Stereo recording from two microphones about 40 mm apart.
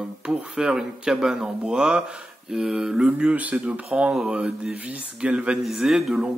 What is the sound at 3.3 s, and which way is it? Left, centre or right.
Speech, right.